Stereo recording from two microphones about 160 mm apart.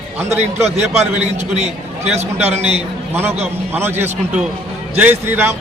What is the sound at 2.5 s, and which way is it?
Speech, 40° right (ahead or behind).